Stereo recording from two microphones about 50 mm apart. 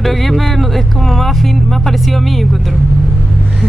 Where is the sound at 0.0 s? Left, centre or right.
Centre.